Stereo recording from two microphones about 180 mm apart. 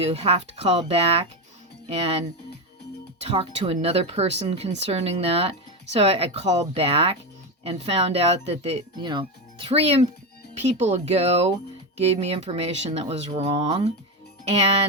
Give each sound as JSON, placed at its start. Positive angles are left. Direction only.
{"t": 0.0, "sound": "speech", "side_deg": -35}